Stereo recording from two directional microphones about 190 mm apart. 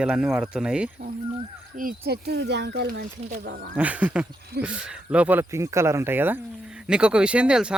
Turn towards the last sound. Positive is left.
turn(degrees=-5)  # may be behind; listen again after turning